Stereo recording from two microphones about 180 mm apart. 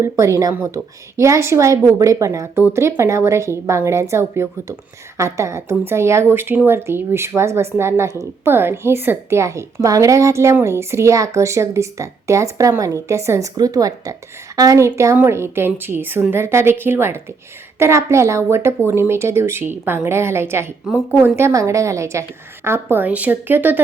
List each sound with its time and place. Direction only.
0.0 s a woman's voice: 15° right (ahead or behind)